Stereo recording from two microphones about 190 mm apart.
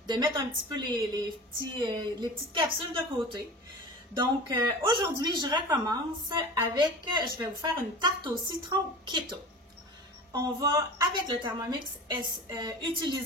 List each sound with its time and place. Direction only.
0.0 s a woman's voice: 25° right (ahead or behind)